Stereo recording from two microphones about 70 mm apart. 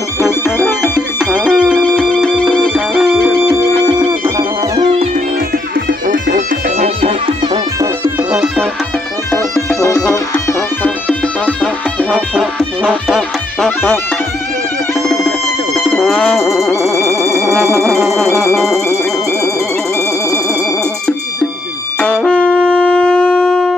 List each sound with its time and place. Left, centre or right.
1.4 s music: centre
1.8 s music: centre
11.1 s music: centre
12.1 s music: centre
15.0 s music: centre
17.1 s music: left
17.7 s music: centre
22.0 s shofar: centre